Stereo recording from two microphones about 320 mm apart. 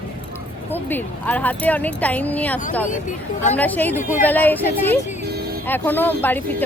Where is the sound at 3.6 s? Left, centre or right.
Centre.